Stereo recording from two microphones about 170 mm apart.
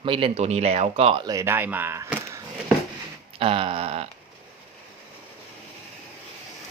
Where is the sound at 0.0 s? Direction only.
30° right (ahead or behind); by 2.4 s 15° right (ahead or behind).